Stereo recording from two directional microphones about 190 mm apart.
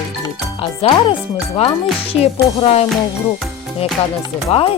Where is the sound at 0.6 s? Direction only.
30° left (ahead or behind).